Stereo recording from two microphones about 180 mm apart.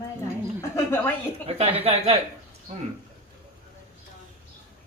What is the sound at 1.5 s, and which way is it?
Speech, 35° right (ahead or behind).